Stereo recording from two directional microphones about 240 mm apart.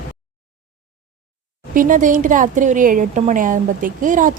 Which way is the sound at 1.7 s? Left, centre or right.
Right.